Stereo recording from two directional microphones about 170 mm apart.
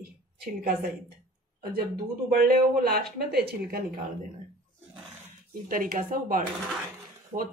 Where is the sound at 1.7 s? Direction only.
65° right (ahead or behind).